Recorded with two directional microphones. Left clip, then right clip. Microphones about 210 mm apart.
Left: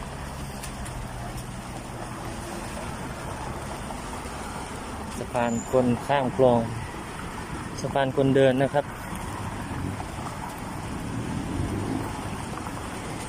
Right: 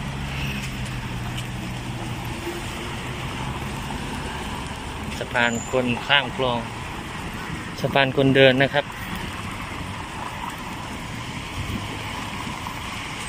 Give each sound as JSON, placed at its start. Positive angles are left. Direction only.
{"t": 5.4, "sound": "speech", "side_deg": 15}
{"t": 7.9, "sound": "speech", "side_deg": 10}